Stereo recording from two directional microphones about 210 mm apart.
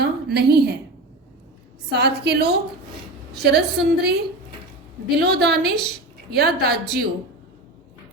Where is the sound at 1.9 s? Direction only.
50° right (ahead or behind).